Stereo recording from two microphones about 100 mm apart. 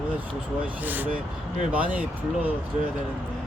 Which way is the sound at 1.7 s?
15° right (ahead or behind).